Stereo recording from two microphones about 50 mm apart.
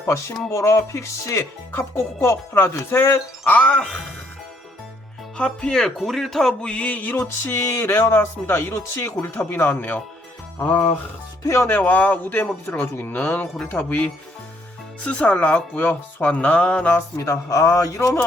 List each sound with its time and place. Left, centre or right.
0.5 s music: left
1.7 s speech: left
3.5 s speech: left
5.4 s speech: left
5.7 s speech: centre; by 7.2 s left
7.4 s speech: left
9.4 s speech: left
10.6 s speech: left
11.4 s music: left
11.7 s speech: left
12.6 s speech: left
17.2 s a man's voice: left